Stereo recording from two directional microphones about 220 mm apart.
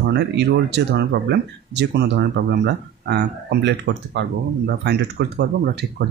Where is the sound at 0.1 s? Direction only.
50° right (ahead or behind).